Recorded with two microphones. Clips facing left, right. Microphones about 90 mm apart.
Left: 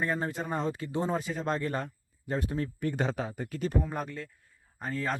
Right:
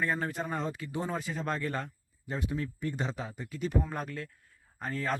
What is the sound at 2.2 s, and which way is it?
Speech, 45° left (ahead or behind).